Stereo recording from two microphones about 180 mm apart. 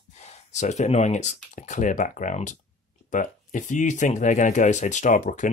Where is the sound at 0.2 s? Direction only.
40° left (ahead or behind).